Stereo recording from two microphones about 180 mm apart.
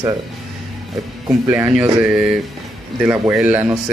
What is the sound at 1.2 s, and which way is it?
Speech, 15° right (ahead or behind).